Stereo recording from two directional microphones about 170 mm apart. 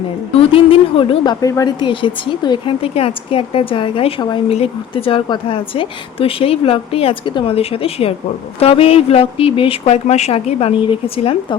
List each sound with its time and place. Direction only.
0.3 s a woman's voice: 35° left (ahead or behind)